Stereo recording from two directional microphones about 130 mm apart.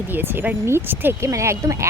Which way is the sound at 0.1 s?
15° right (ahead or behind).